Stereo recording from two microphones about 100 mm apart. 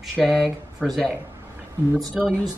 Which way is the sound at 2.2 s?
5° right (ahead or behind).